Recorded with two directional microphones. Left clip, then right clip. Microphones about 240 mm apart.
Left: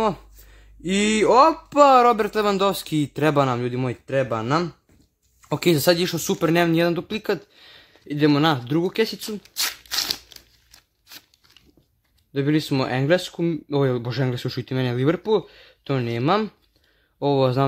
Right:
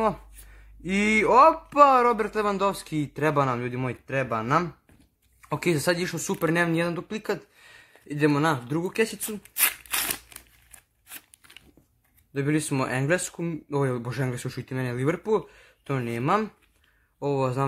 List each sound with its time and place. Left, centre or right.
0.0 s speech: left
9.6 s a sound: centre
12.4 s speech: left